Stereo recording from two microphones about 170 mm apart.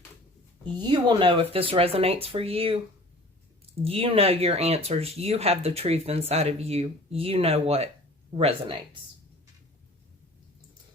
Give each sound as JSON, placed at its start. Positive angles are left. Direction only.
{"t": 0.6, "sound": "speech", "side_deg": -25}
{"t": 3.8, "sound": "speech", "side_deg": -35}